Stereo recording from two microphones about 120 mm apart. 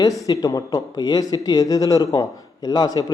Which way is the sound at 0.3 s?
30° left (ahead or behind).